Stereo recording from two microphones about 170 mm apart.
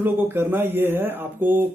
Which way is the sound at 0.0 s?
10° right (ahead or behind).